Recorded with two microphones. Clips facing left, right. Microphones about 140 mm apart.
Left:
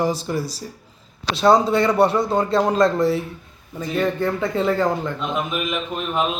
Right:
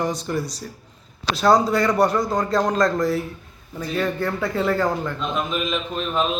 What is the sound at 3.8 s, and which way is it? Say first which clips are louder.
Speech: left 2 dB; 20° left (ahead or behind).